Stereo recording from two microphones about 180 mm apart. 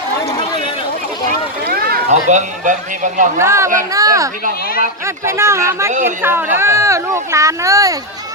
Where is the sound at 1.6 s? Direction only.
55° right (ahead or behind).